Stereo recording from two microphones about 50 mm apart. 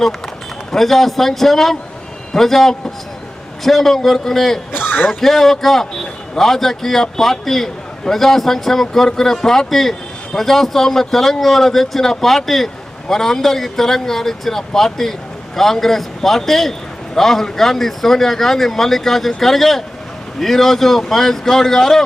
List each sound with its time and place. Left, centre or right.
0.7 s speech: centre
4.7 s a sound: left
5.0 s speech: centre